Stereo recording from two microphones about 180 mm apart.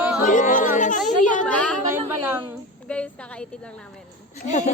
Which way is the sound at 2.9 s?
5° left (ahead or behind).